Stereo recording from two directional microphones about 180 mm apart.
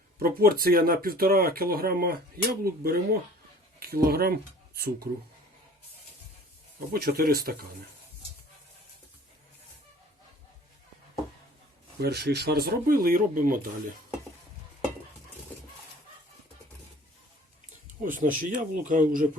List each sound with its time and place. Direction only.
0.2 s speech: 55° right (ahead or behind)
6.7 s speech: 60° right (ahead or behind)
11.9 s speech: 65° right (ahead or behind)
17.8 s speech: 45° right (ahead or behind)